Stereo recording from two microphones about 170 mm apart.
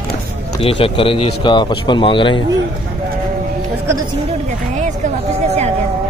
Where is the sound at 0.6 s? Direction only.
35° left (ahead or behind).